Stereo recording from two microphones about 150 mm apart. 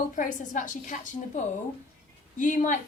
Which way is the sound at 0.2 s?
55° left (ahead or behind).